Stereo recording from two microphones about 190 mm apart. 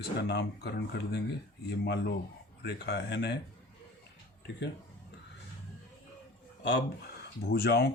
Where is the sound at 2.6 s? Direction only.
65° left (ahead or behind).